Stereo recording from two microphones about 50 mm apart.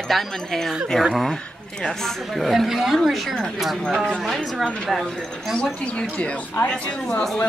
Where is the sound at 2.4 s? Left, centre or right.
Centre.